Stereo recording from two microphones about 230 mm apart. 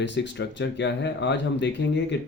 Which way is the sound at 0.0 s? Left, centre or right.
Left.